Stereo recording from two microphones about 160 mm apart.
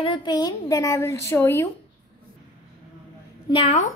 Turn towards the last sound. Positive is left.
turn(degrees=40)  # may be behind; listen again after turning